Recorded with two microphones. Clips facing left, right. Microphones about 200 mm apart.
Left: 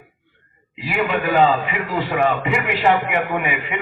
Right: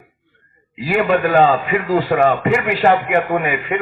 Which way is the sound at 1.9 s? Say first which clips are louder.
Right 5 dB; 40° right (ahead or behind).